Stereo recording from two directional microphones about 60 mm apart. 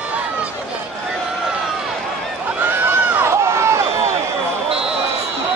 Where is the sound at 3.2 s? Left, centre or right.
Right.